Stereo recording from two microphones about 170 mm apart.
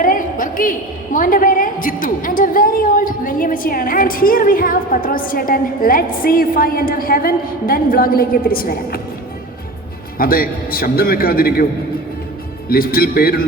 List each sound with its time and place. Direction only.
0.0 s a woman's voice: 55° left (ahead or behind)
10.2 s a man's voice: 60° left (ahead or behind)
12.6 s a man's voice: 60° left (ahead or behind)